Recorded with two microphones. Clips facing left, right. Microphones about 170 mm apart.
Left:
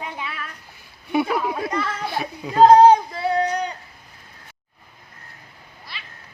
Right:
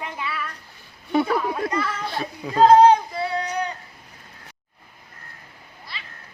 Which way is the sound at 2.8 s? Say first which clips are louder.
Left 2 dB; 40° left (ahead or behind).